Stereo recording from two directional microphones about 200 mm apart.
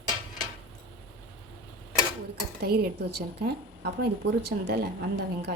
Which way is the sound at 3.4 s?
55° right (ahead or behind).